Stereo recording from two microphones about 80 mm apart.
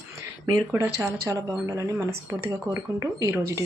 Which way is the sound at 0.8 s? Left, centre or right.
Right.